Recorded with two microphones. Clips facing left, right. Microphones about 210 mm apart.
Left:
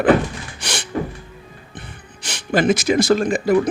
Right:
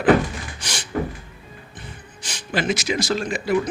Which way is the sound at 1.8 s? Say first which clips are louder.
Left 3 dB; 65° left (ahead or behind).